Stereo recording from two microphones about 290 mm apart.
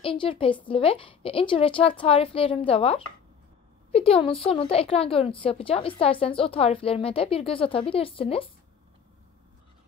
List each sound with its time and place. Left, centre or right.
0.0 s a woman's voice: centre